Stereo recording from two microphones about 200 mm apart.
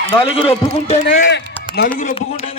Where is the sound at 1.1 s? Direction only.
55° left (ahead or behind).